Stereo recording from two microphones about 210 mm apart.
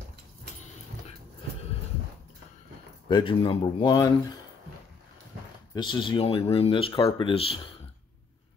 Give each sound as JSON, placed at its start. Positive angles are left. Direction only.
{"t": 3.1, "sound": "speech", "side_deg": 20}
{"t": 5.8, "sound": "speech", "side_deg": 20}